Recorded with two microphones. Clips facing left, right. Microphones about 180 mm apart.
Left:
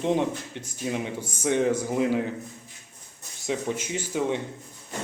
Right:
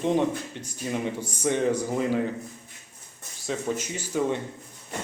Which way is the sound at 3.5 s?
15° left (ahead or behind).